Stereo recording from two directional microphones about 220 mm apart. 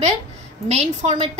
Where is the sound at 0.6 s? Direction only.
30° right (ahead or behind).